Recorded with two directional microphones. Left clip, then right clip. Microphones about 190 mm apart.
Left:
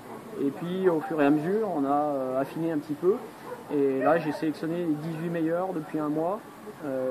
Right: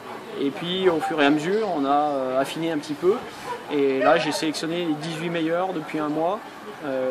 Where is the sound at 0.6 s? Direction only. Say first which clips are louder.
Right 5 dB; 5° right (ahead or behind).